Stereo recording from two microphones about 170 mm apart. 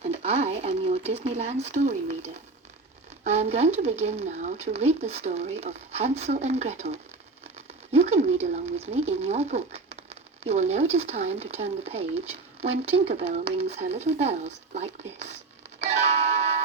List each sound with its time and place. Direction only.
0.0 s speech: 40° right (ahead or behind)
15.8 s music: 40° right (ahead or behind)